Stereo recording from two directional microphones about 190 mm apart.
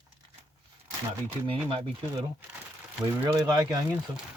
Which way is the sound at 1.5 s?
25° right (ahead or behind).